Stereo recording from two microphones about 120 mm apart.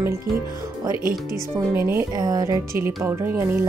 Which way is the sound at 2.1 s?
30° right (ahead or behind).